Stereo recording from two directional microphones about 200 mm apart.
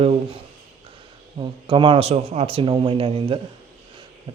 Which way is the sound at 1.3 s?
25° right (ahead or behind).